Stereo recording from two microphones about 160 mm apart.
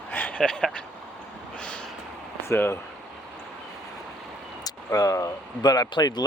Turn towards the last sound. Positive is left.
turn(degrees=25)  # may be behind; listen again after turning